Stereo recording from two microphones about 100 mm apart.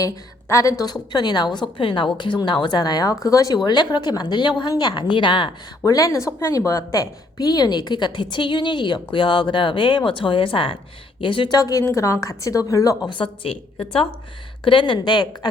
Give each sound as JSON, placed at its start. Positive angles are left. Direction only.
{"t": 0.0, "sound": "a woman's voice", "side_deg": 30}
{"t": 5.8, "sound": "a woman's voice", "side_deg": 35}
{"t": 11.5, "sound": "a woman's voice", "side_deg": 35}
{"t": 13.1, "sound": "speech", "side_deg": 55}
{"t": 14.6, "sound": "a woman's voice", "side_deg": 55}